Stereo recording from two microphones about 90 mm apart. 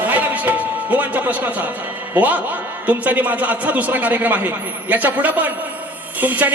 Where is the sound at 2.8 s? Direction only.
20° right (ahead or behind).